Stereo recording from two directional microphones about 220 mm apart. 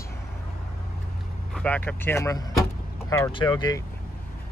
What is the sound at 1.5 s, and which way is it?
Speech, 5° left (ahead or behind).